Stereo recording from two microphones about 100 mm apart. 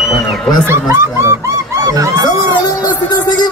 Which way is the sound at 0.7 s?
25° right (ahead or behind).